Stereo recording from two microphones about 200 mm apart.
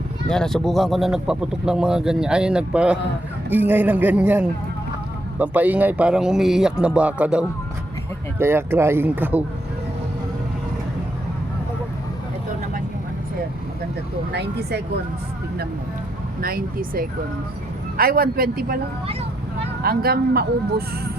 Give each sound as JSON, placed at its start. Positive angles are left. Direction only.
{"t": 0.3, "sound": "speech", "side_deg": 5}
{"t": 14.3, "sound": "speech", "side_deg": -55}
{"t": 16.4, "sound": "speech", "side_deg": -50}
{"t": 19.8, "sound": "speech", "side_deg": -50}